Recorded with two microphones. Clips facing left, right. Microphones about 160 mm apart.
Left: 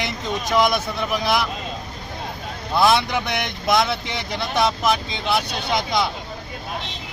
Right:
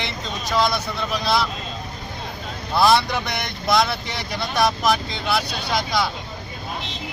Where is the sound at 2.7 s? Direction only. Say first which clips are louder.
Even; 20° left (ahead or behind).